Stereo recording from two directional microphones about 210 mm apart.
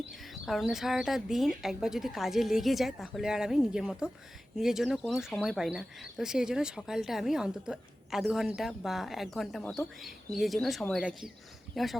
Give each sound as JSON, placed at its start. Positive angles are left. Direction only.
{"t": 0.1, "sound": "speech", "side_deg": 0}